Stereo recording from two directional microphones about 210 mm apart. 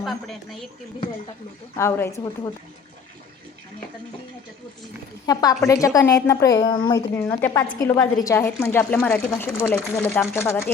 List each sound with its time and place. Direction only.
0.0 s speech: centre (ahead or behind)
1.7 s a woman's voice: 15° left (ahead or behind)
5.2 s a woman's voice: 15° left (ahead or behind)